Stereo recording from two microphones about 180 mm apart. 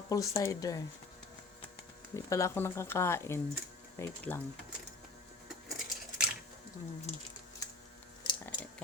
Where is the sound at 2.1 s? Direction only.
15° left (ahead or behind).